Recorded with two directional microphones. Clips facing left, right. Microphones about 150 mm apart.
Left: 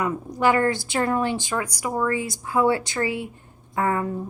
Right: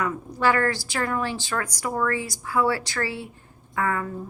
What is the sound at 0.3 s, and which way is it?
A woman's voice, 20° left (ahead or behind).